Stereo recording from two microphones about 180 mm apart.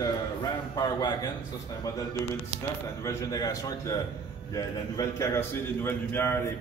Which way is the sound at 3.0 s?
15° left (ahead or behind).